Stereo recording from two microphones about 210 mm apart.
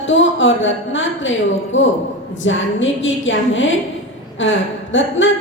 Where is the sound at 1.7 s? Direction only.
65° left (ahead or behind).